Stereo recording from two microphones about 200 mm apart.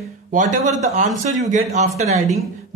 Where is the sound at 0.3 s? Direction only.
40° right (ahead or behind).